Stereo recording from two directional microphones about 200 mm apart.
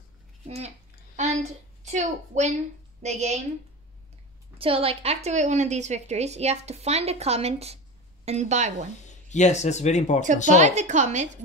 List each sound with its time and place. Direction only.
0.5 s a child's voice: 35° right (ahead or behind)
4.6 s a woman's voice: 30° right (ahead or behind)
9.0 s speech: 35° left (ahead or behind)
10.2 s a woman's voice: 35° right (ahead or behind)